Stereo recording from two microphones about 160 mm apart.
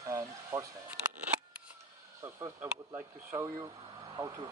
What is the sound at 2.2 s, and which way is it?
Speech, 20° right (ahead or behind).